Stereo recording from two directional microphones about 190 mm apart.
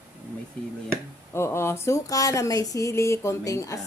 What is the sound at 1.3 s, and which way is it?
Speech, 15° left (ahead or behind).